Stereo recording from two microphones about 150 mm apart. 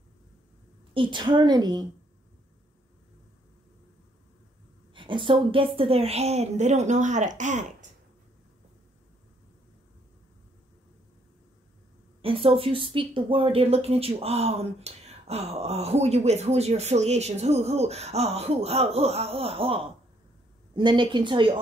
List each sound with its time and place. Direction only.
0.9 s a woman's voice: 30° right (ahead or behind)
4.9 s speech: 35° right (ahead or behind); by 7.9 s 55° right (ahead or behind)
12.2 s speech: 35° right (ahead or behind)